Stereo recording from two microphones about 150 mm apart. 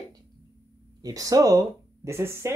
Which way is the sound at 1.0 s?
25° right (ahead or behind).